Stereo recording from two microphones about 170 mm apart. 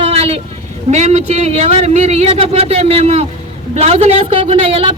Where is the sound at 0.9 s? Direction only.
40° right (ahead or behind).